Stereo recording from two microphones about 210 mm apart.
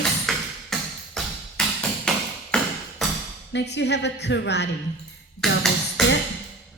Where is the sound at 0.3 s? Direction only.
Centre (ahead or behind).